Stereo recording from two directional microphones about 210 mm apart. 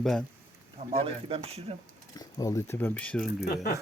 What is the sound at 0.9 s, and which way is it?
Speech, 25° right (ahead or behind).